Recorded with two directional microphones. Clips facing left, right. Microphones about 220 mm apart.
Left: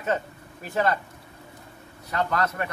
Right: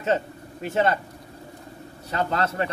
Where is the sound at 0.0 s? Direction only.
25° right (ahead or behind).